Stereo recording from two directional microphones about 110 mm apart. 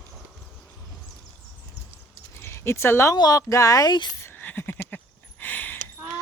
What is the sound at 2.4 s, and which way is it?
Speech, 25° left (ahead or behind).